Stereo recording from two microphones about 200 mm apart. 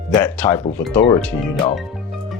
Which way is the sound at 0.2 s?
10° left (ahead or behind).